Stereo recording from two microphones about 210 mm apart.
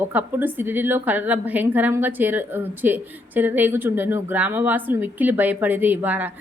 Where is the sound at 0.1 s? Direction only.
10° right (ahead or behind).